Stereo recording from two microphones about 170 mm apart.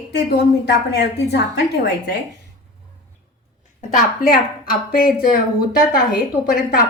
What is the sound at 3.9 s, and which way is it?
Speech, 55° left (ahead or behind).